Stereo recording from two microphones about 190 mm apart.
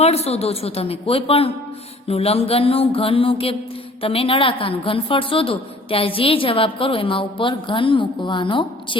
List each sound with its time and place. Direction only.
0.0 s a woman's voice: 35° left (ahead or behind)